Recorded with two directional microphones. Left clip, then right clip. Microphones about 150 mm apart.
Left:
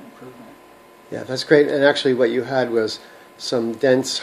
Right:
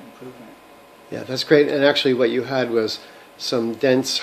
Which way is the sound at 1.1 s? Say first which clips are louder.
Left 1 dB; centre (ahead or behind).